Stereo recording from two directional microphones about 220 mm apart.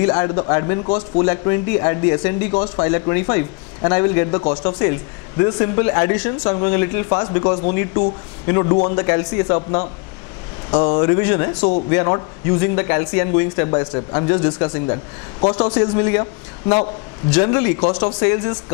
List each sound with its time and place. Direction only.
0.0 s a man's voice: 20° left (ahead or behind)
6.1 s a man's voice: 10° left (ahead or behind)